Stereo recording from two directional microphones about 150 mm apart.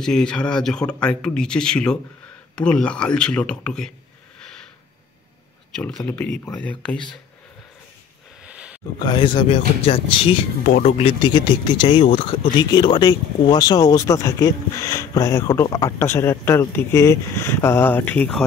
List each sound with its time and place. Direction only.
0.0 s speech: 5° left (ahead or behind)
5.8 s speech: 5° left (ahead or behind)
8.5 s a sound: 10° right (ahead or behind)
9.0 s speech: 30° left (ahead or behind)
10.7 s speech: 60° left (ahead or behind)
11.0 s speech: 35° left (ahead or behind); by 18.4 s 10° left (ahead or behind)